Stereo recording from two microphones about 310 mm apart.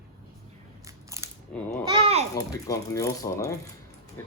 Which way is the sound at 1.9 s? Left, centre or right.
Centre.